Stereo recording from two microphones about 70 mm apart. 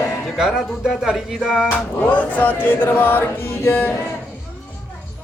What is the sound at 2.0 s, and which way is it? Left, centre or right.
Music, left.